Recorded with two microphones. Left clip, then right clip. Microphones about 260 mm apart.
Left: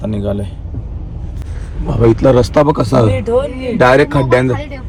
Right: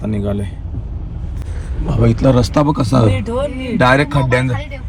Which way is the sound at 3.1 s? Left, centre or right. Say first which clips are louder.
Left 5 dB; left.